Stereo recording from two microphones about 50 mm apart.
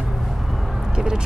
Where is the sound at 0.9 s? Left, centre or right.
Centre.